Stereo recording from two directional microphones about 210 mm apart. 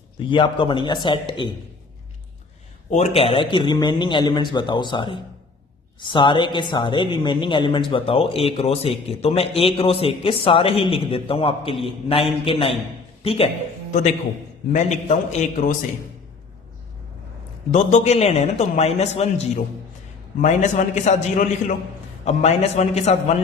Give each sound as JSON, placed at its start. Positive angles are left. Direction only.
{"t": 0.2, "sound": "speech", "side_deg": 25}
{"t": 2.9, "sound": "speech", "side_deg": 30}
{"t": 14.7, "sound": "a man's voice", "side_deg": 35}
{"t": 17.7, "sound": "a man's voice", "side_deg": 35}
{"t": 20.4, "sound": "a man's voice", "side_deg": 35}